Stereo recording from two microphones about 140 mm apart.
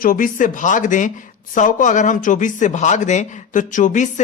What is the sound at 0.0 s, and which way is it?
Speech, 80° left.